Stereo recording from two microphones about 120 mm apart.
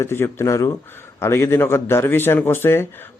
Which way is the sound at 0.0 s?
20° left (ahead or behind).